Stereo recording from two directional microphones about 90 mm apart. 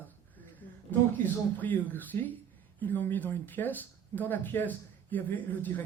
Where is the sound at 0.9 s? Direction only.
20° left (ahead or behind).